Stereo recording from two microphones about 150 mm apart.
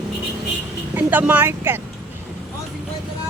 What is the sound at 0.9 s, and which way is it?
Speech, 10° right (ahead or behind).